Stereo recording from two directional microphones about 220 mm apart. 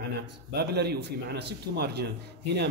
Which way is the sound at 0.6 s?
50° right (ahead or behind).